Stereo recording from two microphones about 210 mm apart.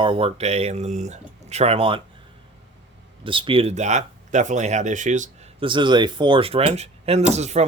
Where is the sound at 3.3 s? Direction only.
25° right (ahead or behind).